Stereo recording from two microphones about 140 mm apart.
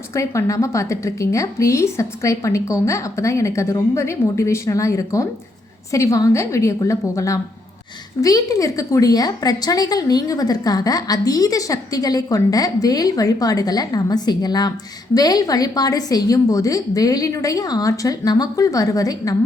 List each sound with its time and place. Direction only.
0.1 s a woman's voice: 20° left (ahead or behind)